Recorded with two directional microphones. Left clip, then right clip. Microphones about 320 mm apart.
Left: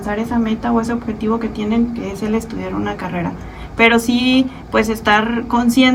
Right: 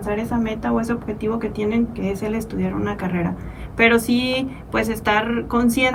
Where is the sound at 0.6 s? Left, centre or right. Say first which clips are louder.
Left 4 dB; centre.